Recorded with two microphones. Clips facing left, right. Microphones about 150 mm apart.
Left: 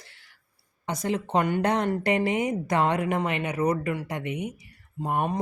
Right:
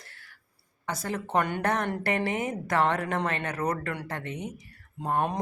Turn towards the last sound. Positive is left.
turn(degrees=10)  # may be behind; listen again after turning